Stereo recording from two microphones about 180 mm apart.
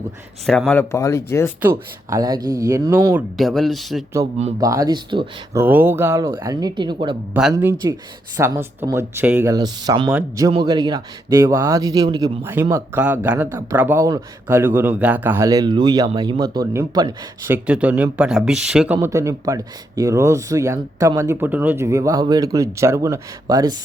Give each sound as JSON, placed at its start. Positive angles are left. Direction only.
{"t": 0.7, "sound": "speech", "side_deg": 15}
{"t": 2.0, "sound": "speech", "side_deg": -20}
{"t": 3.3, "sound": "speech", "side_deg": 0}
{"t": 4.6, "sound": "speech", "side_deg": -20}
{"t": 5.5, "sound": "speech", "side_deg": -10}
{"t": 12.4, "sound": "speech", "side_deg": -10}
{"t": 17.5, "sound": "speech", "side_deg": -5}
{"t": 18.9, "sound": "speech", "side_deg": -15}